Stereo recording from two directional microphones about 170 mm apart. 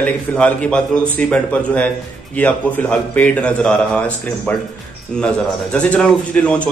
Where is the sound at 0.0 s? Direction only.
10° left (ahead or behind).